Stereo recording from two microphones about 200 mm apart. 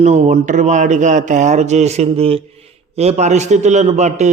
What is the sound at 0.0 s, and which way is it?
A man's voice, 35° right (ahead or behind).